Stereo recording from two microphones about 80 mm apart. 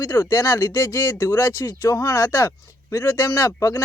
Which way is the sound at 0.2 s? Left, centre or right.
Left.